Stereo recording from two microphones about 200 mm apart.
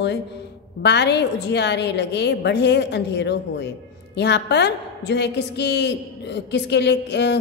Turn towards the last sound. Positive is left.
turn(degrees=60)  # may be behind; listen again after turning